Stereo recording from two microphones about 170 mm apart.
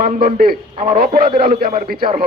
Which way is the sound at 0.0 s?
55° right (ahead or behind).